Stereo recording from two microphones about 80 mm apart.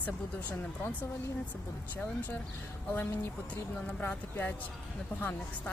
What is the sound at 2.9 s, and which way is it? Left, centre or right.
Speech, left.